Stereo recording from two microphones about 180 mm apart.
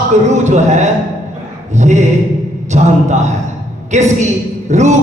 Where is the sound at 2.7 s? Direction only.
40° right (ahead or behind).